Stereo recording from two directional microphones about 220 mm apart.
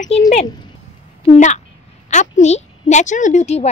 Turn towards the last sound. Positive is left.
turn(degrees=30)  # may be behind; listen again after turning